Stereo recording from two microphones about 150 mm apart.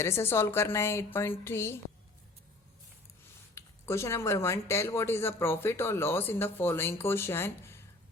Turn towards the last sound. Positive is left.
turn(degrees=15)  # may be behind; listen again after turning